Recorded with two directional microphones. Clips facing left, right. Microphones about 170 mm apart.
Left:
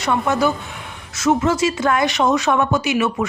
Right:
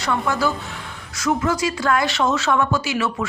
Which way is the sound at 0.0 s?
20° left (ahead or behind).